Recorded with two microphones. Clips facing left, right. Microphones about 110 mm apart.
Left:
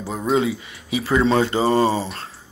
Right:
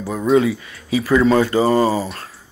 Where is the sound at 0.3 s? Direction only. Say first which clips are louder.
Right 5 dB; 25° left (ahead or behind).